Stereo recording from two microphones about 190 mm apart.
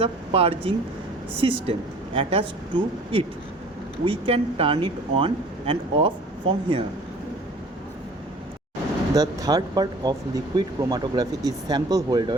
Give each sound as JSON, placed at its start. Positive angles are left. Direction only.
{"t": 0.0, "sound": "speech", "side_deg": -30}
{"t": 9.1, "sound": "speech", "side_deg": -20}